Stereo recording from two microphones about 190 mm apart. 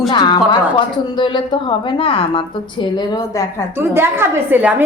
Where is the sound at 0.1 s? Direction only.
25° left (ahead or behind).